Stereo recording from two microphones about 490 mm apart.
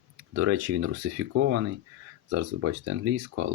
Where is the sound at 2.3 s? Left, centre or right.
Right.